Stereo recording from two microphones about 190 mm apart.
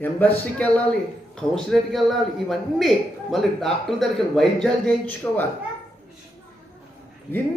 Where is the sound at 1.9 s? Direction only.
Centre (ahead or behind).